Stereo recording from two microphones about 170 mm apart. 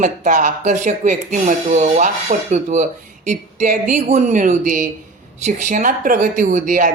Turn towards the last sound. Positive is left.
turn(degrees=-50)  # may be behind; listen again after turning